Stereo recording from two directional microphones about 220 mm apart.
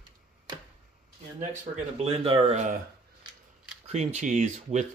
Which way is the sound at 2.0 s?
25° right (ahead or behind).